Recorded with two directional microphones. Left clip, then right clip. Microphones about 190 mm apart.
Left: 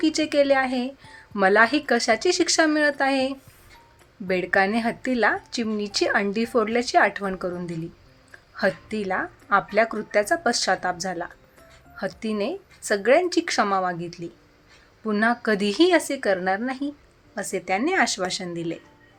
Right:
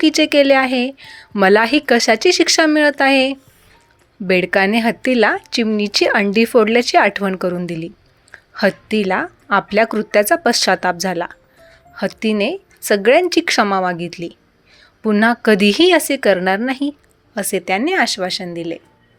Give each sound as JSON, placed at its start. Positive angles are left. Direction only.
{"t": 0.0, "sound": "speech", "side_deg": -40}